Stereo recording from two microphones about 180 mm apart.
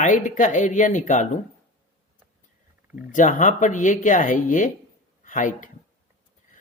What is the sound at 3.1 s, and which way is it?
Speech, 45° left (ahead or behind).